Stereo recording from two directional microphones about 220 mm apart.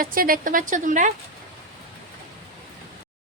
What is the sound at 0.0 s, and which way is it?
A woman's voice, 40° right (ahead or behind).